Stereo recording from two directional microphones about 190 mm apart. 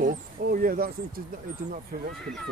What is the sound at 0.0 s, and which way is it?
Speech, 45° right (ahead or behind).